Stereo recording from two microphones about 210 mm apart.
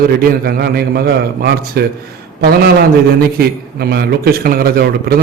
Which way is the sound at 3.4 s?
50° right (ahead or behind).